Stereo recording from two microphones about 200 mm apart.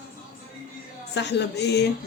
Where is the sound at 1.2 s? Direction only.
60° left (ahead or behind).